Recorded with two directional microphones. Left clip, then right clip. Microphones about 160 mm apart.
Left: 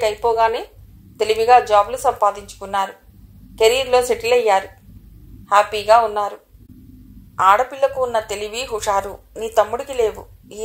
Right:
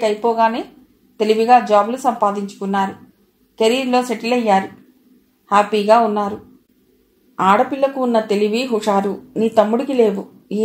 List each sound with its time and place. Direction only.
0.0 s a woman's voice: 40° left (ahead or behind)
7.3 s a woman's voice: 40° left (ahead or behind)